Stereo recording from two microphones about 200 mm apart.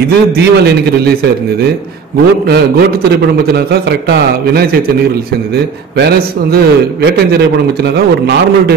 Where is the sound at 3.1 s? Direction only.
55° right (ahead or behind).